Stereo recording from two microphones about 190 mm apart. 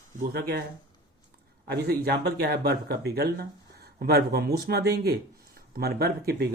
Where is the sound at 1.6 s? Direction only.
60° right (ahead or behind).